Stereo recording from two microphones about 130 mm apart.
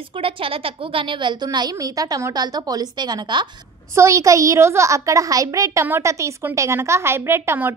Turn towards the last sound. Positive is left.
turn(degrees=-15)  # may be behind; listen again after turning